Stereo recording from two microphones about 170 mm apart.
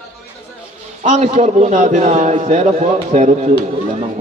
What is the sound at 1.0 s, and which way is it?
A man's voice, 45° right (ahead or behind).